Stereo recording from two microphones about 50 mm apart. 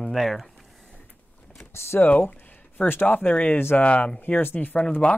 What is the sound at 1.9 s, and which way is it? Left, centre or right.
Speech, left.